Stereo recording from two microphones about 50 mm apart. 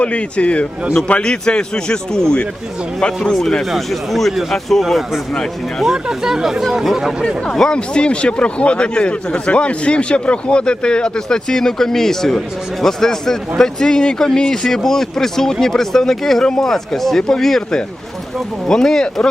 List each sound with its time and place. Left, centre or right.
0.0 s a man's voice: left; by 7.3 s centre
7.5 s speech: centre
7.8 s a man's voice: left